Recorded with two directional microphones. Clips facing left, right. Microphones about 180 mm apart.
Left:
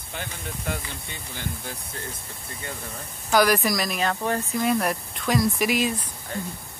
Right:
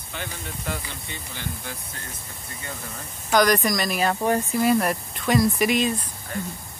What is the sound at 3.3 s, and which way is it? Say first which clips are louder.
Speech: right 1 dB; 5° left (ahead or behind).